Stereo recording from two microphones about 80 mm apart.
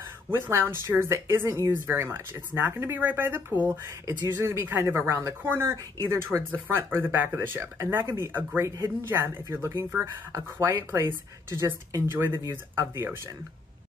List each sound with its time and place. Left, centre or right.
0.3 s speech: right